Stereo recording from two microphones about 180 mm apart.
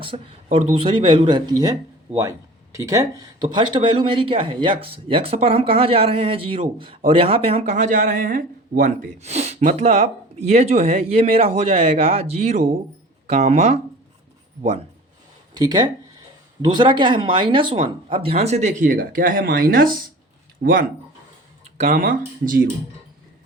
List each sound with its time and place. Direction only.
0.0 s speech: 30° right (ahead or behind)
15.5 s speech: 25° right (ahead or behind); by 20.9 s 60° right (ahead or behind)
21.8 s speech: 45° right (ahead or behind)